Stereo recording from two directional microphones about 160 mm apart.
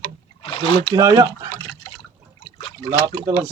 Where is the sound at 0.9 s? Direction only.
25° right (ahead or behind).